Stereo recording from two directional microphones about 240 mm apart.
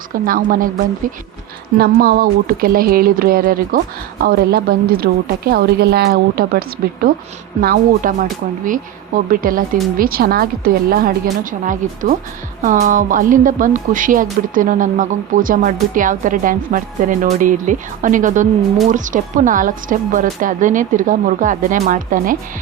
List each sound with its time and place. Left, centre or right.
0.1 s speech: right
1.8 s speech: right